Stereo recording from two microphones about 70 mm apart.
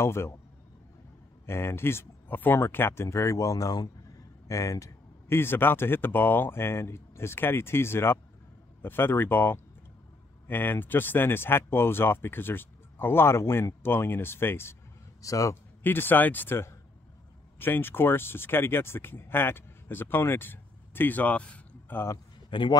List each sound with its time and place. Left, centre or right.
0.0 s speech: left
1.4 s speech: left
4.5 s speech: left
5.3 s speech: left
15.2 s speech: left
15.8 s speech: left